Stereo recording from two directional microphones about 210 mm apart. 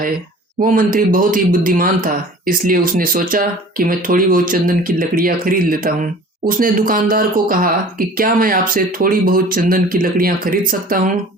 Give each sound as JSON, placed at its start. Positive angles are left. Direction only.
{"t": 0.6, "sound": "speech", "side_deg": -40}